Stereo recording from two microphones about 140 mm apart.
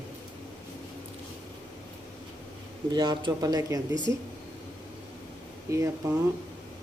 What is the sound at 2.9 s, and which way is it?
Speech, 30° right (ahead or behind).